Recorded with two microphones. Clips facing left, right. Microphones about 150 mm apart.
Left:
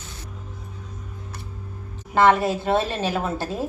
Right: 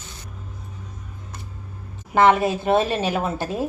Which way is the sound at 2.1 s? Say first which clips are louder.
Right 1 dB; 15° right (ahead or behind).